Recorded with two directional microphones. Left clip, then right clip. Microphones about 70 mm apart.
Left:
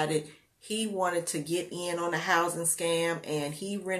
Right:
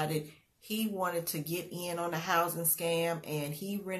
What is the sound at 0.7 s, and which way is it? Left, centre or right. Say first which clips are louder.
A woman's voice: left 4 dB; right.